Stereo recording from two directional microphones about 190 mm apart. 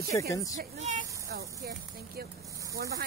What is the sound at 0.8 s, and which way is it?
Speech, 40° right (ahead or behind).